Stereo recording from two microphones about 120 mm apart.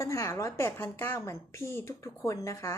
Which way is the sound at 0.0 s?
25° left (ahead or behind).